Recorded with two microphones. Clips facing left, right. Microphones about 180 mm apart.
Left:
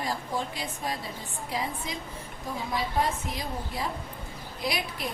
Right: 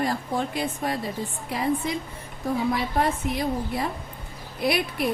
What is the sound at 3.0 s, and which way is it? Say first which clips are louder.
A woman's voice: right 5 dB; 60° right (ahead or behind).